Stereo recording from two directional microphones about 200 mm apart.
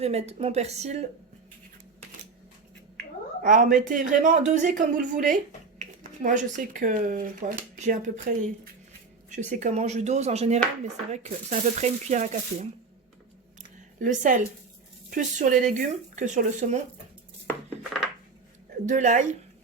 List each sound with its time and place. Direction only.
0.0 s speech: 30° right (ahead or behind)
3.4 s speech: 40° right (ahead or behind)
13.6 s a sound: 40° right (ahead or behind)
15.1 s speech: 40° right (ahead or behind)
18.9 s speech: 40° right (ahead or behind)